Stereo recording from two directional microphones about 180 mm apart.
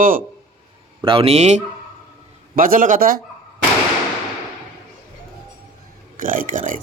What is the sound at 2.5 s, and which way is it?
Speech, 50° right (ahead or behind).